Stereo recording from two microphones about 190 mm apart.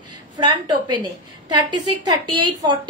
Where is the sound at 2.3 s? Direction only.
25° right (ahead or behind).